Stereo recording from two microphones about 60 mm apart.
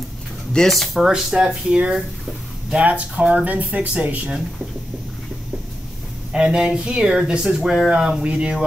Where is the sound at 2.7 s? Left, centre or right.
Right.